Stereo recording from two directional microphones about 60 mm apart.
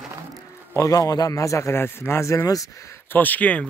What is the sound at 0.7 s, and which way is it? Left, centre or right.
A man's voice, left.